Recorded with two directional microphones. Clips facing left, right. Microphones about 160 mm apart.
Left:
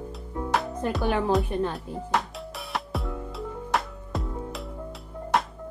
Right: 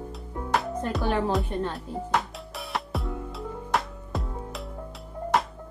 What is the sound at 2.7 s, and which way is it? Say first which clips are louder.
Music: right 1 dB; centre (ahead or behind).